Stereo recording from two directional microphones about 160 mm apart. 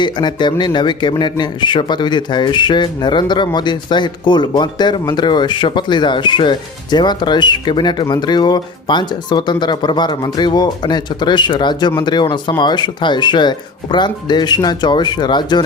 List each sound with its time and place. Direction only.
0.0 s speech: 30° left (ahead or behind)